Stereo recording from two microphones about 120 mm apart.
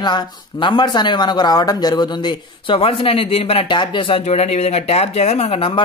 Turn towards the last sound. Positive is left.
turn(degrees=55)  # may be behind; listen again after turning